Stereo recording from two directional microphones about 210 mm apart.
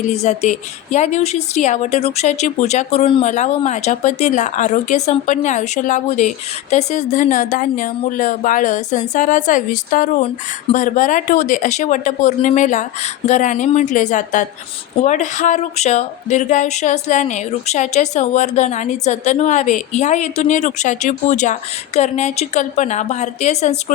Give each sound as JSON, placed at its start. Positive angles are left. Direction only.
{"t": 0.1, "sound": "speech", "side_deg": 30}